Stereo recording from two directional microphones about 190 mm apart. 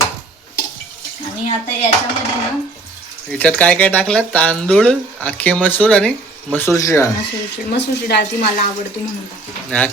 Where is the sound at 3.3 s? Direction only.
10° left (ahead or behind).